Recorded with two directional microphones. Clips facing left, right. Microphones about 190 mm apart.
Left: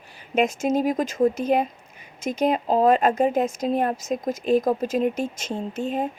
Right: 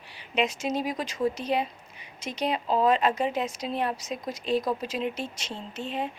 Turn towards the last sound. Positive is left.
turn(degrees=45)  # may be behind; listen again after turning